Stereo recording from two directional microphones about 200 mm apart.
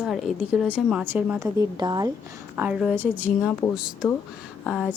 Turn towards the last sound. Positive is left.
turn(degrees=0)  # may be behind; listen again after turning